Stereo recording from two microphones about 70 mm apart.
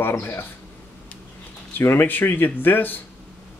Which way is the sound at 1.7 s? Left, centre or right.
Left.